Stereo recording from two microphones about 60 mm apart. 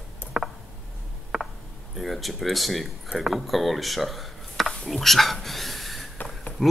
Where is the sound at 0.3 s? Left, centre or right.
Centre.